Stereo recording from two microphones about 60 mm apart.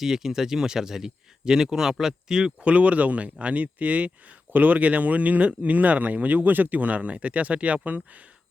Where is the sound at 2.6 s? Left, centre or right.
Right.